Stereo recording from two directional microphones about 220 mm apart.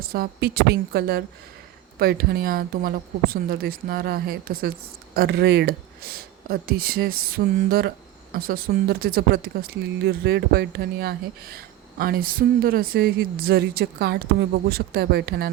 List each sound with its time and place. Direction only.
0.0 s speech: 45° right (ahead or behind)